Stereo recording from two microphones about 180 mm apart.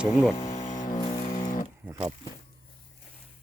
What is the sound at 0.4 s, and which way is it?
Music, 45° left (ahead or behind).